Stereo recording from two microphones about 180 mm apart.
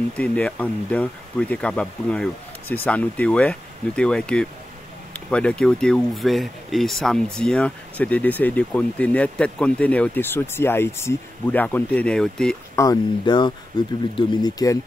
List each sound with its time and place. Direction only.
0.2 s speech: 5° left (ahead or behind)
12.7 s speech: 20° left (ahead or behind)